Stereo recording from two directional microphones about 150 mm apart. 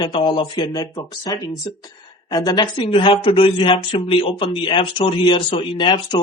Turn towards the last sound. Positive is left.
turn(degrees=30)  # may be behind; listen again after turning